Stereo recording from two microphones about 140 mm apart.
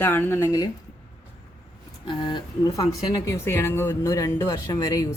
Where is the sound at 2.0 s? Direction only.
35° left (ahead or behind).